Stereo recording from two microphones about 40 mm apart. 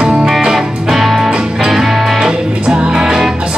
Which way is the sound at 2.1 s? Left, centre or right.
Centre.